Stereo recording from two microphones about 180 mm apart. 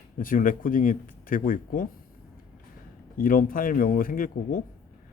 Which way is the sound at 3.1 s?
50° left (ahead or behind).